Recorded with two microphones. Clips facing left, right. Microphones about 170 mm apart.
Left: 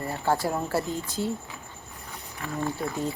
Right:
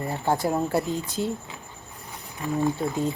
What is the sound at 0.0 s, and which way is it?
Speech, 20° right (ahead or behind).